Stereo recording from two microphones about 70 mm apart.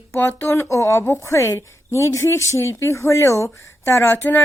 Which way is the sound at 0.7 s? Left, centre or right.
Left.